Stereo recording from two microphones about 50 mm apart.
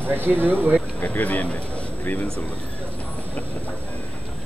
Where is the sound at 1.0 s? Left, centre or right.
Left.